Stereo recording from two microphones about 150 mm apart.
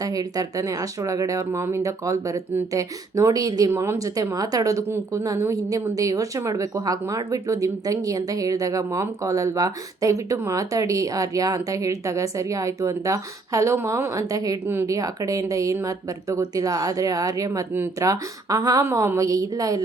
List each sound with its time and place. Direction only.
0.0 s speech: 25° right (ahead or behind)